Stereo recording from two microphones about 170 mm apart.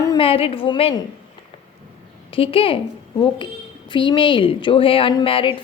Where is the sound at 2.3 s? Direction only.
35° left (ahead or behind).